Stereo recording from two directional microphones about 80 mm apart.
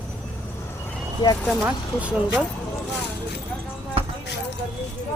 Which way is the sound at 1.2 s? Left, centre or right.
Left.